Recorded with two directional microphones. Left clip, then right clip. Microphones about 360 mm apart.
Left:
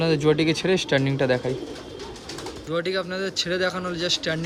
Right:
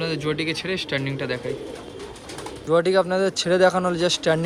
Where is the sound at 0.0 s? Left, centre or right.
Centre.